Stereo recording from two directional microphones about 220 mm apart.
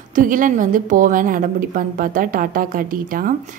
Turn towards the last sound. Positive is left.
turn(degrees=-40)  # may be behind; listen again after turning